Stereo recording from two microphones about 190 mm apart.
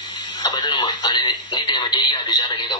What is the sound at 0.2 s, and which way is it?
Speech, 25° left (ahead or behind).